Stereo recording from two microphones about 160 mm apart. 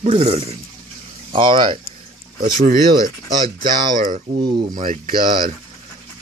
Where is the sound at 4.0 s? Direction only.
60° right (ahead or behind).